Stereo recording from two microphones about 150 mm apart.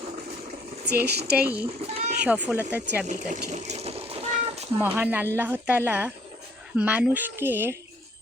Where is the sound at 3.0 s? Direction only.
55° right (ahead or behind).